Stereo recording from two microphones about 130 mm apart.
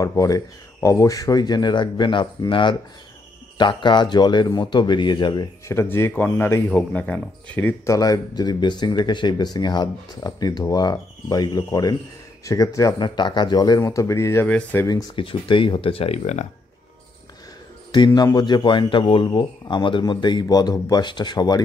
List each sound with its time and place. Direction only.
0.0 s speech: 25° left (ahead or behind)
5.7 s speech: 20° left (ahead or behind)
7.8 s speech: 25° left (ahead or behind)
15.1 s speech: 40° left (ahead or behind)
17.9 s speech: 35° left (ahead or behind)